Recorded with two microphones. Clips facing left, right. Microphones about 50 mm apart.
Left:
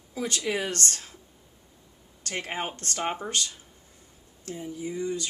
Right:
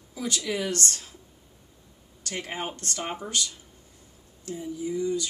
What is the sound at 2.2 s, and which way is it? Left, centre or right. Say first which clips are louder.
Speech: left 1 dB; left.